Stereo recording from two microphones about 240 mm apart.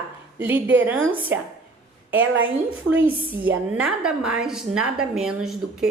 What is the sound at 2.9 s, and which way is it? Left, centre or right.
A woman's voice, centre.